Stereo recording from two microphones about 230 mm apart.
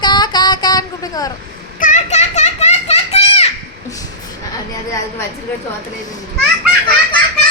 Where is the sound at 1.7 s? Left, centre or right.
Left.